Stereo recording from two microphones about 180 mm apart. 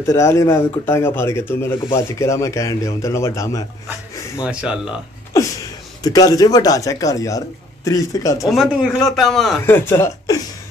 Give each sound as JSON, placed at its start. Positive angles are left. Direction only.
{"t": 0.0, "sound": "speech", "side_deg": 15}
{"t": 4.4, "sound": "a man's voice", "side_deg": -5}
{"t": 6.0, "sound": "speech", "side_deg": 20}
{"t": 8.5, "sound": "a man's voice", "side_deg": 0}
{"t": 9.7, "sound": "speech", "side_deg": 15}